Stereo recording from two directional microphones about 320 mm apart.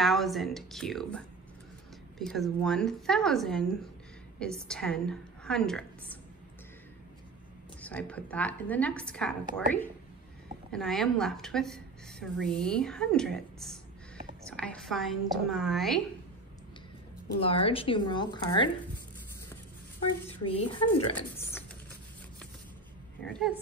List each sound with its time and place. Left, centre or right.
0.0 s a woman's voice: centre
7.8 s a woman's voice: centre
10.7 s a woman's voice: centre
14.4 s a woman's voice: centre
17.4 s speech: centre
20.4 s a woman's voice: left
21.4 s typing: centre
23.2 s a woman's voice: centre